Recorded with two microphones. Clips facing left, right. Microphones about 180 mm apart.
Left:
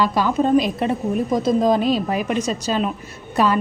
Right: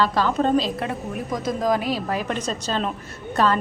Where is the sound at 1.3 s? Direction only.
25° left (ahead or behind).